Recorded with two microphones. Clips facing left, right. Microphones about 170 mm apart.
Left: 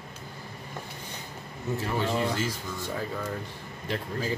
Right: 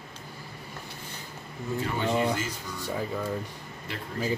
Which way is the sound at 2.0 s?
10° right (ahead or behind).